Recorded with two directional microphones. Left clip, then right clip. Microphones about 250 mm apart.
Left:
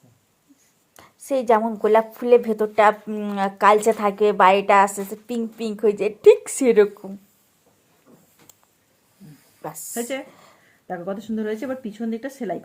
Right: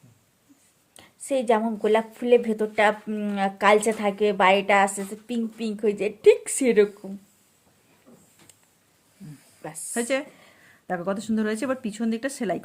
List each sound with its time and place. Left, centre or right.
0.9 s a woman's voice: centre
9.6 s a woman's voice: centre
9.9 s speech: right